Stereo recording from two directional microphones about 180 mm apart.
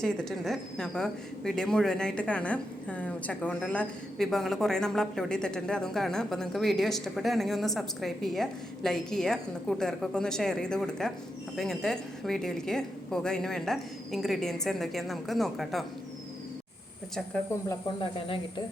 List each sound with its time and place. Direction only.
0.0 s speech: 5° left (ahead or behind)
18.0 s speech: 30° left (ahead or behind)